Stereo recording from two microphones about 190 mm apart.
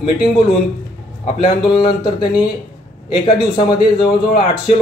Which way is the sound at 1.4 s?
25° left (ahead or behind).